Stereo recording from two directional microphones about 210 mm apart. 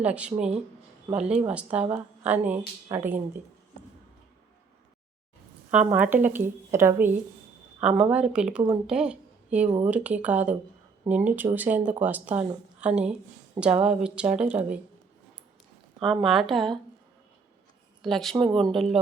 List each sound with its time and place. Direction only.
0.0 s a woman's voice: 5° right (ahead or behind)
5.7 s a woman's voice: 5° right (ahead or behind)
16.0 s speech: centre (ahead or behind)
18.0 s speech: centre (ahead or behind)
18.3 s speech: 25° right (ahead or behind)
18.6 s speech: centre (ahead or behind)